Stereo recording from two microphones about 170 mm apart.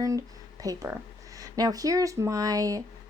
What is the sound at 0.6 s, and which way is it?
A woman's voice, 20° right (ahead or behind).